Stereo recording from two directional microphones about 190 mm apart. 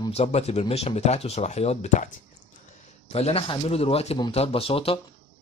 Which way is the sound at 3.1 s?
30° left (ahead or behind).